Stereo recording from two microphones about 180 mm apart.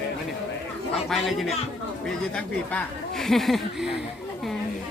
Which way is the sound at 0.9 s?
Centre (ahead or behind).